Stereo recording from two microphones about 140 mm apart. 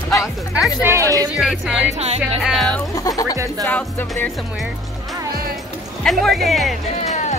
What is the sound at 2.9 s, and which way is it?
Speech, 25° left (ahead or behind).